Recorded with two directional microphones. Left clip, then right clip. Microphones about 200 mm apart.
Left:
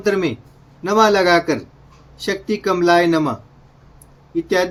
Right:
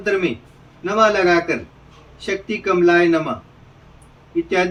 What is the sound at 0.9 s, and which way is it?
Speech, 60° left (ahead or behind).